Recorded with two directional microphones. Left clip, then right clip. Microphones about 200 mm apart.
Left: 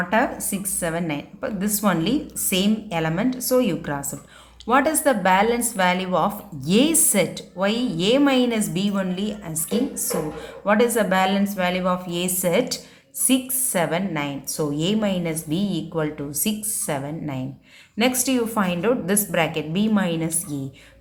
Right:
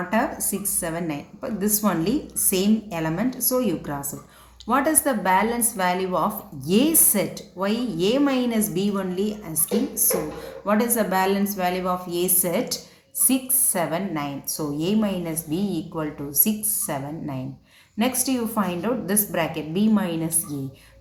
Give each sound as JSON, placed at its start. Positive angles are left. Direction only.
{"t": 0.5, "sound": "a woman's voice", "side_deg": 45}
{"t": 10.7, "sound": "a woman's voice", "side_deg": 45}